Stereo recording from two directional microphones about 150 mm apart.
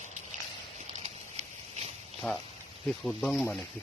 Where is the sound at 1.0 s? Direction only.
45° right (ahead or behind).